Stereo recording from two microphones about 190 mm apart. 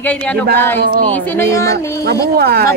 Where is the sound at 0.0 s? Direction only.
5° left (ahead or behind).